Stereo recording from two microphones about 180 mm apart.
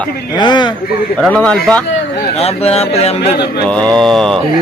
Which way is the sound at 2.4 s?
35° left (ahead or behind).